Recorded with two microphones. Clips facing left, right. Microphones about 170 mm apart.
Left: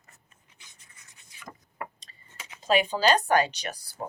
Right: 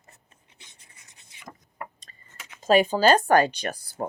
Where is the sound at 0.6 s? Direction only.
30° right (ahead or behind).